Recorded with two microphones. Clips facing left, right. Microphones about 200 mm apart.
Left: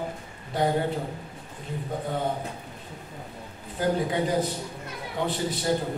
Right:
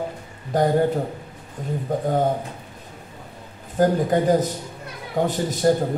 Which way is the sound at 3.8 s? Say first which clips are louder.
Right 7 dB; 45° right (ahead or behind).